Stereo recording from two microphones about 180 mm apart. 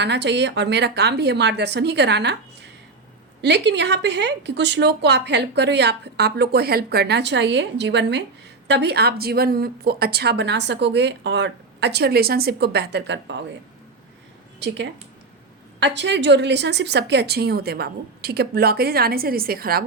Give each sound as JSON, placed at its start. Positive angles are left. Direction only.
{"t": 0.0, "sound": "speech", "side_deg": -75}
{"t": 3.4, "sound": "a woman's voice", "side_deg": -70}
{"t": 14.6, "sound": "speech", "side_deg": -75}
{"t": 15.8, "sound": "a woman's voice", "side_deg": -75}